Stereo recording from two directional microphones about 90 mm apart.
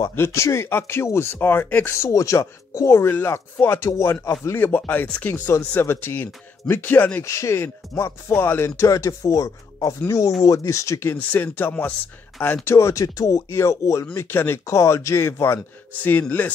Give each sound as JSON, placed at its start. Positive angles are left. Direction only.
{"t": 0.1, "sound": "speech", "side_deg": 30}
{"t": 2.0, "sound": "speech", "side_deg": 35}
{"t": 7.2, "sound": "speech", "side_deg": 35}
{"t": 11.1, "sound": "speech", "side_deg": 20}
{"t": 12.6, "sound": "speech", "side_deg": 30}